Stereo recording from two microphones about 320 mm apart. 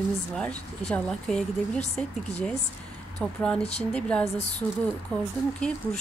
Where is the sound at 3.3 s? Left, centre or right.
Centre.